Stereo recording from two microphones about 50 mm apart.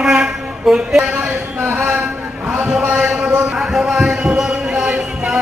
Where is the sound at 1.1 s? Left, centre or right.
Right.